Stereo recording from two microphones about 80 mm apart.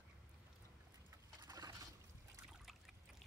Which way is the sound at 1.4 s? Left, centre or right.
Right.